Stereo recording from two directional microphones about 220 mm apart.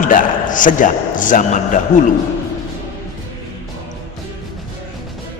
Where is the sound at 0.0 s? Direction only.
35° left (ahead or behind).